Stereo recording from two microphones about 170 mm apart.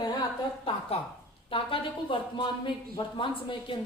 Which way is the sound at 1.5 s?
30° left (ahead or behind).